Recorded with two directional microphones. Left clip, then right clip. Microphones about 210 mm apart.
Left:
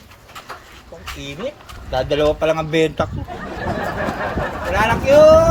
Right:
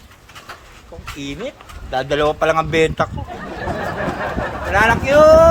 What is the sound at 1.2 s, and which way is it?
Speech, 15° right (ahead or behind).